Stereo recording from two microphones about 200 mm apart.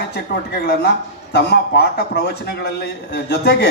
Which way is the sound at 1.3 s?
55° left (ahead or behind).